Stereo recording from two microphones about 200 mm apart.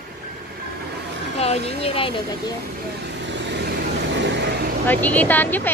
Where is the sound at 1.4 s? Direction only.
30° left (ahead or behind).